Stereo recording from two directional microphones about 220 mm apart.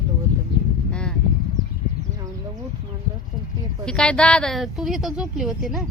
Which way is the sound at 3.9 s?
5° left (ahead or behind).